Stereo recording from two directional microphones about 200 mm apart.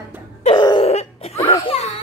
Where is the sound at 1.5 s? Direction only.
25° left (ahead or behind).